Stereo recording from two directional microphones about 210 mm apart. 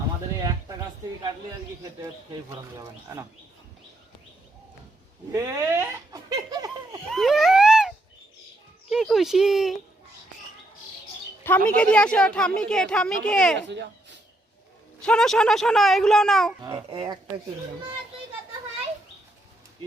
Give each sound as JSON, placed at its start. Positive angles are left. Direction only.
{"t": 2.7, "sound": "speech", "side_deg": -15}
{"t": 5.3, "sound": "laughter", "side_deg": -15}
{"t": 7.1, "sound": "a sound", "side_deg": 0}
{"t": 8.9, "sound": "speech", "side_deg": 0}
{"t": 11.4, "sound": "speech", "side_deg": 10}
{"t": 13.6, "sound": "speech", "side_deg": -55}
{"t": 15.0, "sound": "speech", "side_deg": 5}
{"t": 16.6, "sound": "a child's voice", "side_deg": -20}